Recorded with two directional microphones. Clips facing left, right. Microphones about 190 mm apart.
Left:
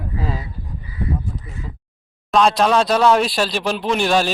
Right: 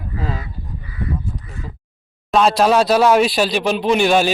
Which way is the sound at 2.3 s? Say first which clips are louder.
Right 1 dB; 5° right (ahead or behind).